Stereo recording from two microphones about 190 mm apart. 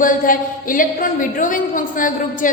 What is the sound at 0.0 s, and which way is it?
A woman's voice, 45° left (ahead or behind).